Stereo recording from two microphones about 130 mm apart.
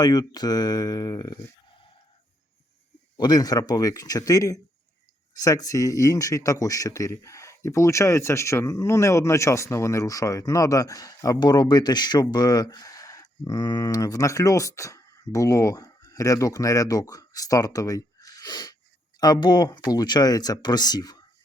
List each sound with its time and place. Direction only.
0.0 s speech: 30° left (ahead or behind)
3.2 s speech: 30° left (ahead or behind)